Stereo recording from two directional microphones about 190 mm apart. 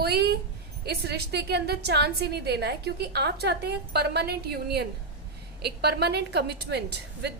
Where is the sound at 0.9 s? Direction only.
60° right (ahead or behind).